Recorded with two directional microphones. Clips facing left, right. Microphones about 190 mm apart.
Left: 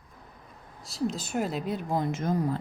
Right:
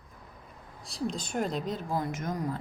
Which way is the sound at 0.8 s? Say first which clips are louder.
Left 3 dB; centre (ahead or behind).